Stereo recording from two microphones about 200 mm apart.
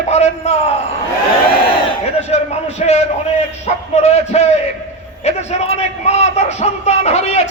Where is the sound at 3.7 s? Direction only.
35° left (ahead or behind).